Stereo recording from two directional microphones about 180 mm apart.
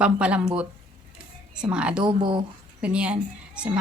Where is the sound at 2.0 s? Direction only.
25° right (ahead or behind).